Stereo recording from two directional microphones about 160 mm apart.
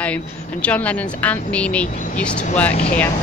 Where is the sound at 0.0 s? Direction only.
10° left (ahead or behind).